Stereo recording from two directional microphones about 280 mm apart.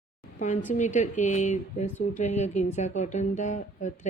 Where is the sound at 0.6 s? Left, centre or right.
Left.